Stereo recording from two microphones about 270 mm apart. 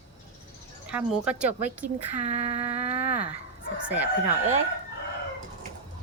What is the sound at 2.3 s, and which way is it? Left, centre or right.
Humming, right.